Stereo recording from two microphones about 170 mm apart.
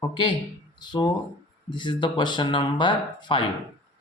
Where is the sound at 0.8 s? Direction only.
25° left (ahead or behind).